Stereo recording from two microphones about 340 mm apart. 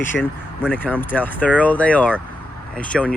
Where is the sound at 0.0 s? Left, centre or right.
Centre.